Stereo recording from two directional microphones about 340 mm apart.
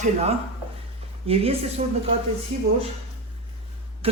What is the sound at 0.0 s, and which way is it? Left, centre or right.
A woman's voice, centre.